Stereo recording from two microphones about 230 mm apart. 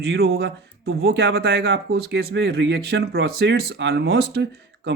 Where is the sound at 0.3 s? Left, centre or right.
Right.